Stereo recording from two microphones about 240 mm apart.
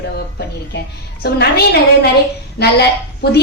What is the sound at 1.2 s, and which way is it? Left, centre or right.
Speech, left.